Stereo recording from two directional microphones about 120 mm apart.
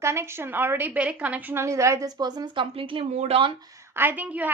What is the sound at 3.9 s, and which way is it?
Speech, 15° right (ahead or behind).